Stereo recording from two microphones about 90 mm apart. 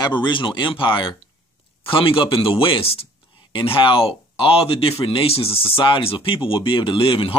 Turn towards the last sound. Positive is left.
turn(degrees=80)